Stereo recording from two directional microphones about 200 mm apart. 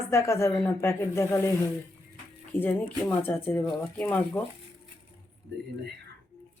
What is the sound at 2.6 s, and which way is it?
Speech, 10° left (ahead or behind).